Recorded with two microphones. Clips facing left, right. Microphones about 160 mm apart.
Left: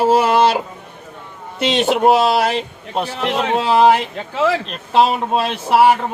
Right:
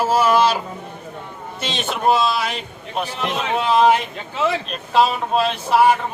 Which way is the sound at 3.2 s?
80° left.